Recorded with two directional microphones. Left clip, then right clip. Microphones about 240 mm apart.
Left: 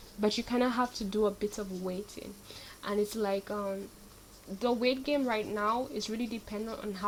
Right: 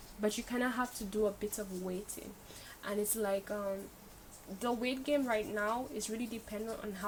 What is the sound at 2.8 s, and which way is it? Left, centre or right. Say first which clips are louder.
Speech: left 4 dB; left.